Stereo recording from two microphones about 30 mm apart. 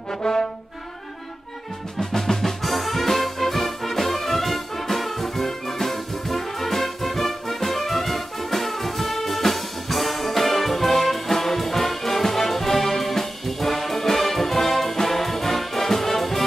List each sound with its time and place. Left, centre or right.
0.2 s brass instrument: centre
2.0 s music: centre
2.6 s music: centre